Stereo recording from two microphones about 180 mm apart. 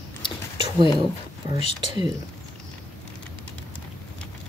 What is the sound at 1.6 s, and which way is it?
Speech, 35° left (ahead or behind).